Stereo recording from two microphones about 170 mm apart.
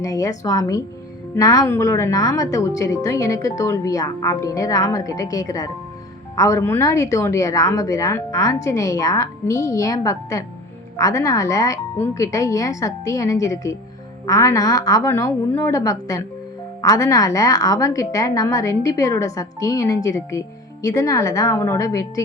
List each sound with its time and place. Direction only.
0.0 s a woman's voice: 20° left (ahead or behind)